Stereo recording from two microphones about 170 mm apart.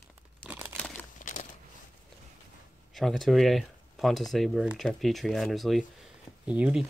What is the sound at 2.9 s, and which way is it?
Speech, centre (ahead or behind).